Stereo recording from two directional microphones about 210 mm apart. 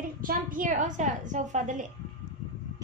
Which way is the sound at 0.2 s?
40° right (ahead or behind).